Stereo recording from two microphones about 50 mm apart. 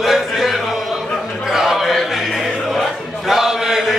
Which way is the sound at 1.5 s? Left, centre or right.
Centre.